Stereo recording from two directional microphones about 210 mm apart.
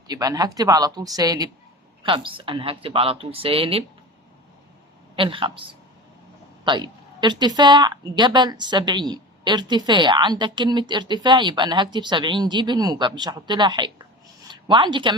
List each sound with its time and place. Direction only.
0.1 s a woman's voice: 20° right (ahead or behind)
5.1 s a woman's voice: 25° right (ahead or behind)
6.7 s a woman's voice: 20° right (ahead or behind)
14.4 s a sound: 20° right (ahead or behind)